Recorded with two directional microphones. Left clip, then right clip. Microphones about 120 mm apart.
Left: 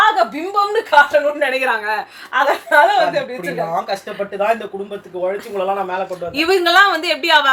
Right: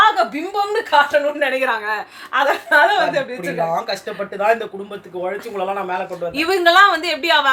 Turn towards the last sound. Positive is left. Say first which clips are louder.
# left 2 dB
turn(degrees=10)  # may be behind; listen again after turning